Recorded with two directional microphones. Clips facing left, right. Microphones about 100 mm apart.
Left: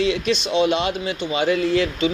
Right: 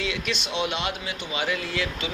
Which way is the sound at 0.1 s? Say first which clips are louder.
Left 9 dB; 30° left (ahead or behind).